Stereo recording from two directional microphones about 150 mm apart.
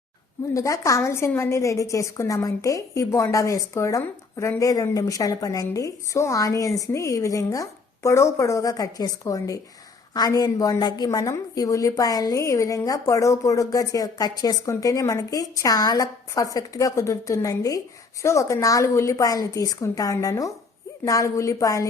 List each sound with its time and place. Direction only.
0.5 s a woman's voice: 20° left (ahead or behind)